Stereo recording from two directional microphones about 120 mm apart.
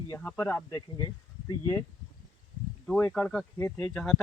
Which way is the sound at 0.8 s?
40° left (ahead or behind).